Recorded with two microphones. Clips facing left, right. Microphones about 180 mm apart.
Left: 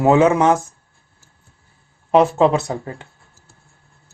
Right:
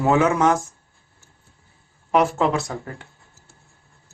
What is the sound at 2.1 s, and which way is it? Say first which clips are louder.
Speech: left 5 dB; 25° left (ahead or behind).